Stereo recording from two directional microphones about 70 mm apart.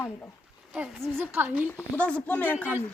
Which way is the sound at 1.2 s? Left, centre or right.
Right.